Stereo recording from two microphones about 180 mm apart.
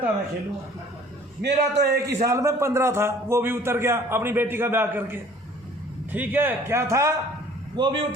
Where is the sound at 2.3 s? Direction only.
15° right (ahead or behind).